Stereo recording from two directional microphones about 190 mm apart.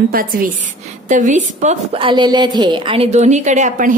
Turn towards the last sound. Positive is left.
turn(degrees=-40)  # may be behind; listen again after turning